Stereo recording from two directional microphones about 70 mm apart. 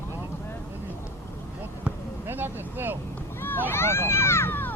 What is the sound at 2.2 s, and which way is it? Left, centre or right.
Vehicle, right.